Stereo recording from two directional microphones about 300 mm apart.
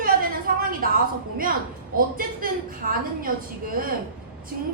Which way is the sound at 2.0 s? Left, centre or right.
Right.